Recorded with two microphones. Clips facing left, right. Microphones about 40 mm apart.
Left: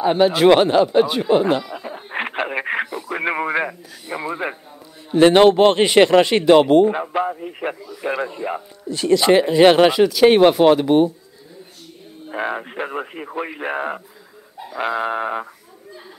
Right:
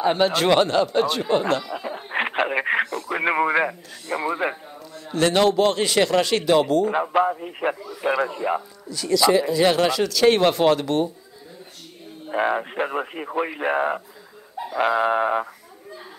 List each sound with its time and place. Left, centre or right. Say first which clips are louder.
0.0 s speech: left 4 dB; centre
0.5 s speech: left 5 dB; centre
1.7 s a sound: right 1 dB; centre
3.1 s speech: right 1 dB; centre
5.1 s speech: left 7 dB; left
6.9 s speech: right 1 dB; centre
8.0 s speech: right 1 dB; centre
8.4 s speech: right 3 dB; centre
8.8 s speech: left 4 dB; left
9.8 s speech: left 5 dB; centre
12.3 s speech: right 3 dB; centre